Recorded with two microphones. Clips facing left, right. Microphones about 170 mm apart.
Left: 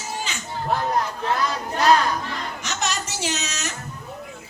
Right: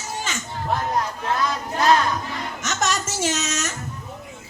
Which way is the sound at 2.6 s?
45° right (ahead or behind).